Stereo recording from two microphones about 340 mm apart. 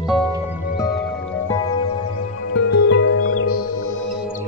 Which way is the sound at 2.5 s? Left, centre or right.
Left.